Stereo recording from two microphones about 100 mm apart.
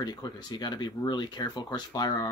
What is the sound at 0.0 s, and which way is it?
Speech, 40° left (ahead or behind).